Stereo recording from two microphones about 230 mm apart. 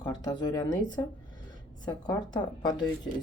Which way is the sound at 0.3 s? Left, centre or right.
Centre.